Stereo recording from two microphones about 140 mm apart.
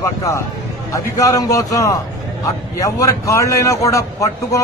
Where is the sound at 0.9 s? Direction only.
25° left (ahead or behind).